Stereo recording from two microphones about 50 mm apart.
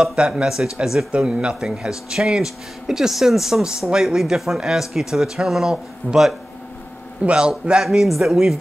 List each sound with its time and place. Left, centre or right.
0.0 s a man's voice: centre
7.2 s a man's voice: centre
7.8 s a man's voice: centre